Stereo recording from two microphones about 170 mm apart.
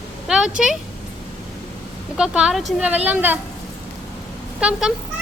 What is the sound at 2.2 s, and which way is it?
Speech, 5° right (ahead or behind).